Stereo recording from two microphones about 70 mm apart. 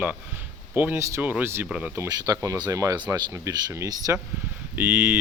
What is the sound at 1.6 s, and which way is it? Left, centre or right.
Speech, centre.